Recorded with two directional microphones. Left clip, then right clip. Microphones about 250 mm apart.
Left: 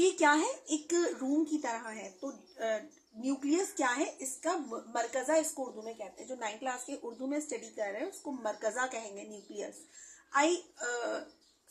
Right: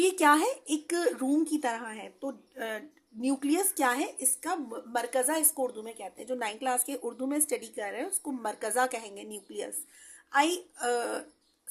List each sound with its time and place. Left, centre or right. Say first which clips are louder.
0.0 s speech: right 4 dB; right